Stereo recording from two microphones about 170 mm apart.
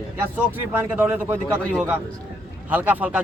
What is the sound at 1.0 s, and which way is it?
Speech, 10° right (ahead or behind).